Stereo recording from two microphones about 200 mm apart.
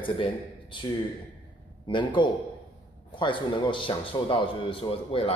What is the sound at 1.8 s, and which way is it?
Speech, 25° left (ahead or behind).